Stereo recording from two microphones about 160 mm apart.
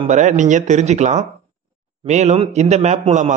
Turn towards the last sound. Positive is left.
turn(degrees=-50)  # may be behind; listen again after turning